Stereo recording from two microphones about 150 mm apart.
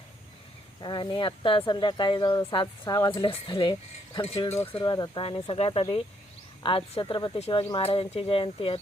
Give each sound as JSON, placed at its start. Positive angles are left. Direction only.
{"t": 0.8, "sound": "speech", "side_deg": 30}
{"t": 5.2, "sound": "speech", "side_deg": 40}